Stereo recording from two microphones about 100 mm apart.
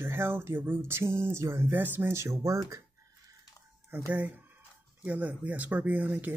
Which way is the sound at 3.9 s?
25° right (ahead or behind).